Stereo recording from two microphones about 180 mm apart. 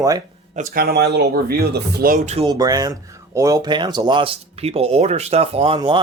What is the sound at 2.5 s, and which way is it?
Speech, 20° right (ahead or behind).